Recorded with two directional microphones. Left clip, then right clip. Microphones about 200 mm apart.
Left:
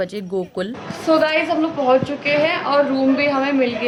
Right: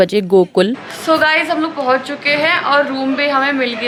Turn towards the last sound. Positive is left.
turn(degrees=5)  # may be behind; listen again after turning